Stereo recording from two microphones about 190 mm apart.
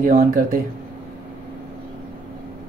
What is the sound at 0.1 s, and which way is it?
Speech, 45° right (ahead or behind).